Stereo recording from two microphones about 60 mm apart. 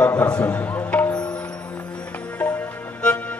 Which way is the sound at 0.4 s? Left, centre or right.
Left.